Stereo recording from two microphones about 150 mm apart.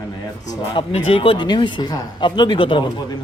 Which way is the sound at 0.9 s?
40° left (ahead or behind).